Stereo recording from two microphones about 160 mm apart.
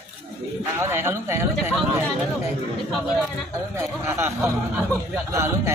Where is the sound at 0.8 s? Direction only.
15° right (ahead or behind).